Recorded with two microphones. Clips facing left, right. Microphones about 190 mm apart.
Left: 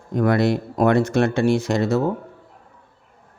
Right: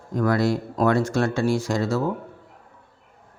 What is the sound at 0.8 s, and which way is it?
Speech, 20° left (ahead or behind).